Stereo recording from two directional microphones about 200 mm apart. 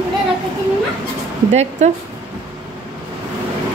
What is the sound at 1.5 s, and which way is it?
Speech, 35° right (ahead or behind).